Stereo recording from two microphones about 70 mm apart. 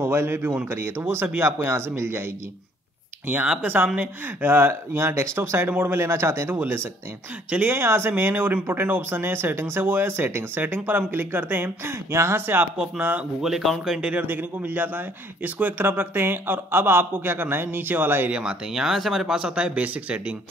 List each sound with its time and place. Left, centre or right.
0.0 s a man's voice: right
3.6 s a man's voice: right
12.7 s speech: centre
14.1 s a man's voice: right
18.3 s speech: centre